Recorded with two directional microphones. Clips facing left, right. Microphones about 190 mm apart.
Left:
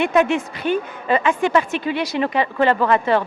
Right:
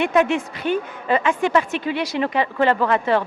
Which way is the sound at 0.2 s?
10° left (ahead or behind).